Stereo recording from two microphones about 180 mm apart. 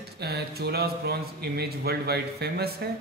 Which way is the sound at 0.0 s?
65° right (ahead or behind).